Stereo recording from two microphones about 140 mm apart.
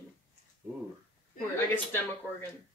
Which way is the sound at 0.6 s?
15° right (ahead or behind).